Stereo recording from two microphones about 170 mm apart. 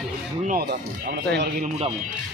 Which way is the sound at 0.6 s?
70° right (ahead or behind).